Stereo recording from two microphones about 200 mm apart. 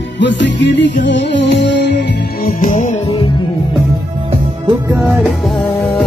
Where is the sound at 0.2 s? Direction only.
65° left (ahead or behind).